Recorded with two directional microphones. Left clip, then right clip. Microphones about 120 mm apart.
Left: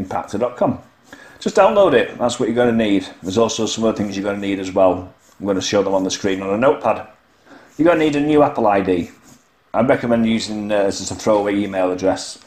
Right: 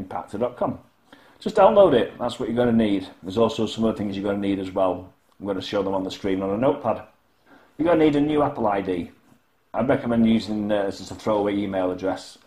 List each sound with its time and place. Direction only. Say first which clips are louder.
0.1 s a man's voice: left 6 dB; 5° left (ahead or behind)
6.1 s a man's voice: left 5 dB; 15° left (ahead or behind)
7.8 s a man's voice: left 4 dB; 5° left (ahead or behind)